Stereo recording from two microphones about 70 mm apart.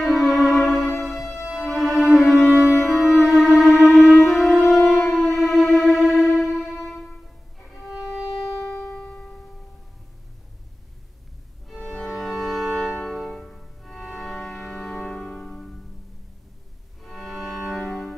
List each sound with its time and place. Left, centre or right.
0.0 s music: centre
1.4 s violin: centre
2.8 s music: centre
6.3 s violin: centre
6.7 s music: centre
7.7 s violin: centre
9.0 s music: centre
11.6 s music: centre
13.1 s organ: centre
17.0 s music: centre
17.8 s music: centre